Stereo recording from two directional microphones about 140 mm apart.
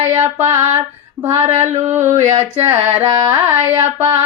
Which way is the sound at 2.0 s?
55° right (ahead or behind).